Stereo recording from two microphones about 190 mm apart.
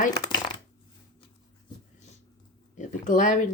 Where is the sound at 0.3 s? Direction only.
20° left (ahead or behind).